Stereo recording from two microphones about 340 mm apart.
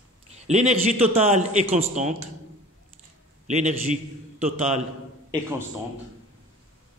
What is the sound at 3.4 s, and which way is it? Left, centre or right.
A man's voice, right.